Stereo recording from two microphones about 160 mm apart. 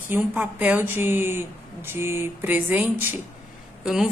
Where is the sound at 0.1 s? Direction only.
10° right (ahead or behind).